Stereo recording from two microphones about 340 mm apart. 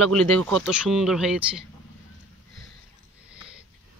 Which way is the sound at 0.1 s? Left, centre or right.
Centre.